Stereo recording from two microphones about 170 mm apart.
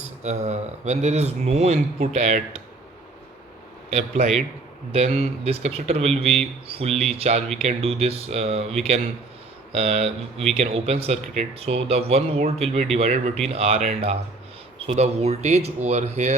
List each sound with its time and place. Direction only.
0.2 s speech: 40° right (ahead or behind)
3.8 s speech: 40° right (ahead or behind)
9.7 s speech: 40° right (ahead or behind)